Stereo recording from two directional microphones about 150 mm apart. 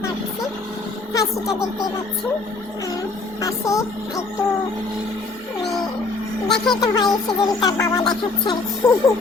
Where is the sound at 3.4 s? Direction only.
20° left (ahead or behind).